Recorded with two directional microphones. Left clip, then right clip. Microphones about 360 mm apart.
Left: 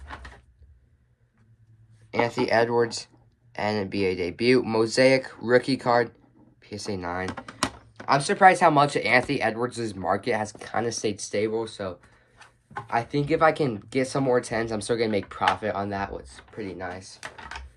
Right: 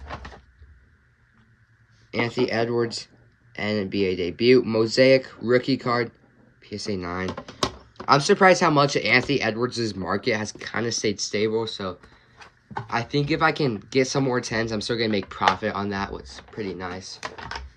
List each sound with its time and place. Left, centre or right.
2.0 s speech: centre
12.4 s a sound: right
12.9 s speech: centre
17.2 s speech: right